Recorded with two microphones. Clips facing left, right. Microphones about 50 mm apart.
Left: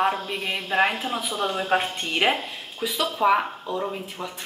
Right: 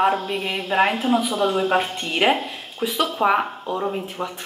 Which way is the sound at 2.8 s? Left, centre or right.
Right.